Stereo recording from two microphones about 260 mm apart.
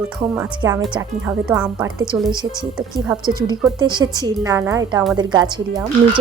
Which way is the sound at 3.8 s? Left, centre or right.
Centre.